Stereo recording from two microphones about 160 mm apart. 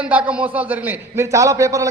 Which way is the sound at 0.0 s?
10° right (ahead or behind).